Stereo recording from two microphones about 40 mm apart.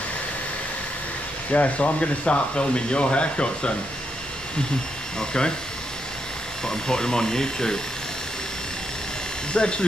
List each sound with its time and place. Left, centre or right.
1.5 s speech: left
6.6 s speech: centre
9.5 s speech: left